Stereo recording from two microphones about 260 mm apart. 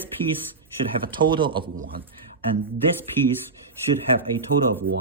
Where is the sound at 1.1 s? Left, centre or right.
Centre.